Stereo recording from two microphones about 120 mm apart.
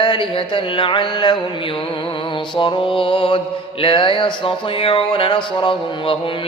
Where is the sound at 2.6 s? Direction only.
45° left (ahead or behind).